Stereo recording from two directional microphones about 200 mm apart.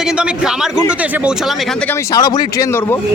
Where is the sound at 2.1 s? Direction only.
20° left (ahead or behind).